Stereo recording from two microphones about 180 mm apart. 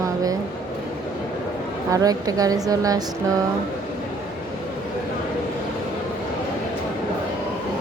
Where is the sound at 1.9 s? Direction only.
20° right (ahead or behind).